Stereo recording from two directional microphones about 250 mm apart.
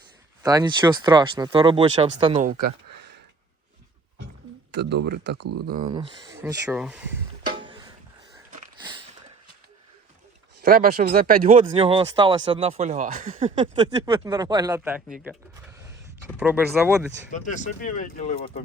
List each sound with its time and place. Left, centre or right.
0.4 s speech: centre
4.7 s speech: right
5.9 s speech: centre
8.8 s a sound: centre
10.6 s speech: right
11.6 s speech: centre
16.4 s speech: centre
17.3 s speech: left